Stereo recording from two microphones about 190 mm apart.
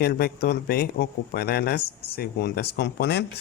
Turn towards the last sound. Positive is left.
turn(degrees=60)  # may be behind; listen again after turning